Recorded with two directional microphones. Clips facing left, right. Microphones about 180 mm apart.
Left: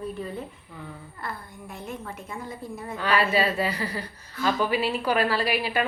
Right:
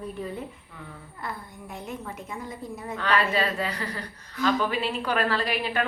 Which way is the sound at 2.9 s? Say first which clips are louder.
Left 2 dB; 5° left (ahead or behind).